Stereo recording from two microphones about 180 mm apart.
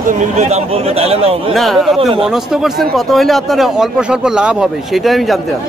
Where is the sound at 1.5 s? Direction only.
Centre (ahead or behind).